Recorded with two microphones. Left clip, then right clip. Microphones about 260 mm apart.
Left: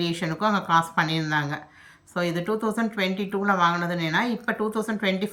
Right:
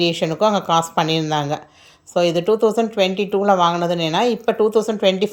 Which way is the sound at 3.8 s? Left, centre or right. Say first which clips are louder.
Right 7 dB; right.